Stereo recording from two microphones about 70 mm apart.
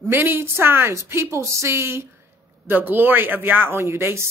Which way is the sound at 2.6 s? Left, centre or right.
Right.